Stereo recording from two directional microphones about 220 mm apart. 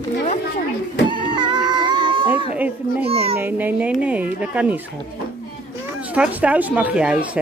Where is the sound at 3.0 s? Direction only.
25° right (ahead or behind).